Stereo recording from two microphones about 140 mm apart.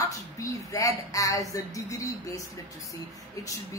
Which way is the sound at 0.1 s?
25° left (ahead or behind).